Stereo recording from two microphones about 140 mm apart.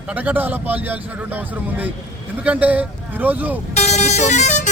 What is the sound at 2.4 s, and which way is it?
Speech, 10° right (ahead or behind).